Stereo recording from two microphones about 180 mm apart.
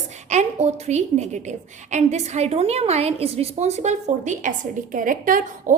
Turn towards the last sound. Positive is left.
turn(degrees=-50)  # may be behind; listen again after turning